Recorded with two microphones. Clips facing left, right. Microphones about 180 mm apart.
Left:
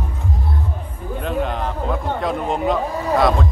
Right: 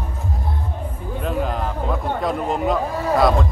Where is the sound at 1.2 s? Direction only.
Centre (ahead or behind).